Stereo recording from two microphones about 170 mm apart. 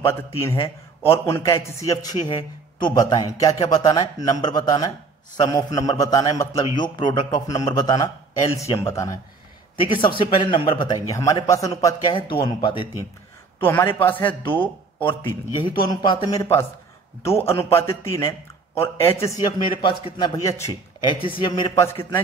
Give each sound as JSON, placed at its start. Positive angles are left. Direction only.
{"t": 0.0, "sound": "a man's voice", "side_deg": 15}
{"t": 0.6, "sound": "a man's voice", "side_deg": 35}
{"t": 1.2, "sound": "a man's voice", "side_deg": 15}
{"t": 13.6, "sound": "a man's voice", "side_deg": 10}
{"t": 15.6, "sound": "a man's voice", "side_deg": 30}
{"t": 21.1, "sound": "a man's voice", "side_deg": 30}